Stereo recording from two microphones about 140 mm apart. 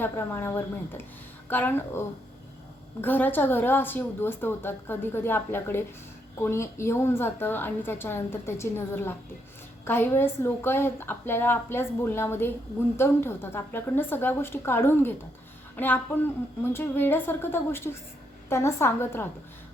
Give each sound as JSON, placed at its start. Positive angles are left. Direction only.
{"t": 0.0, "sound": "a woman's voice", "side_deg": 15}